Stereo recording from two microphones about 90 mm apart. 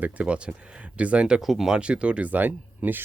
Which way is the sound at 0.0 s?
15° right (ahead or behind).